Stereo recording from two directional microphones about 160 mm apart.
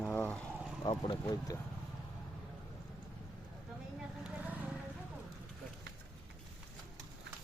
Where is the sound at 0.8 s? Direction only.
25° left (ahead or behind).